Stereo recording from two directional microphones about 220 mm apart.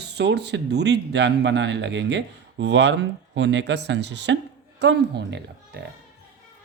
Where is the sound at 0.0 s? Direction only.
50° right (ahead or behind).